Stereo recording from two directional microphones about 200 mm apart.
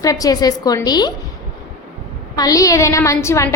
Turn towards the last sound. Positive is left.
turn(degrees=15)  # may be behind; listen again after turning